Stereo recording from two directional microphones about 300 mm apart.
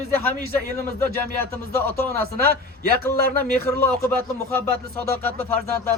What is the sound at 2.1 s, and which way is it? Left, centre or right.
Speech, right.